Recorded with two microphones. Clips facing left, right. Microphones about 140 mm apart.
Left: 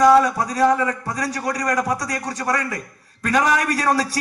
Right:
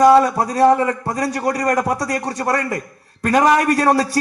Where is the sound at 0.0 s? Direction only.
30° right (ahead or behind).